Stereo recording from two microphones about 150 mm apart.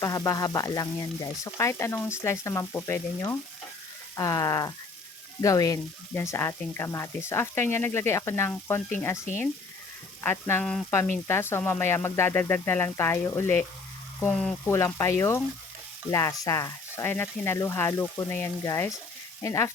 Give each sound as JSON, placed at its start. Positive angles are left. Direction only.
{"t": 0.0, "sound": "speech", "side_deg": 20}
{"t": 10.2, "sound": "speech", "side_deg": 15}